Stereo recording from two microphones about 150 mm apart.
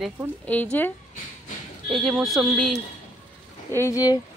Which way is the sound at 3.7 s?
20° left (ahead or behind).